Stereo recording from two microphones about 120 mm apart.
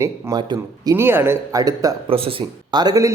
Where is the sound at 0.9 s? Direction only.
20° right (ahead or behind).